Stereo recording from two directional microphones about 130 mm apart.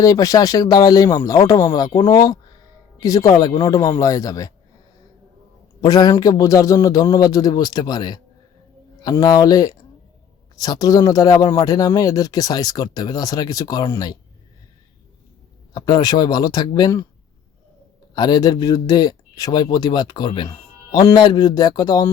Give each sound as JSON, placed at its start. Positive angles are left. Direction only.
{"t": 0.0, "sound": "speech", "side_deg": 25}
{"t": 5.8, "sound": "speech", "side_deg": 30}
{"t": 15.7, "sound": "speech", "side_deg": 35}
{"t": 18.1, "sound": "speech", "side_deg": 30}